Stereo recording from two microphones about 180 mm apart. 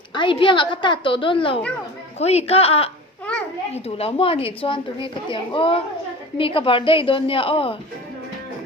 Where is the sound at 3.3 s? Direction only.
5° left (ahead or behind).